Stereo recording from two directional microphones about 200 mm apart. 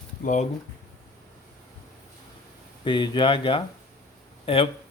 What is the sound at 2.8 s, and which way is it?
Speech, 25° left (ahead or behind).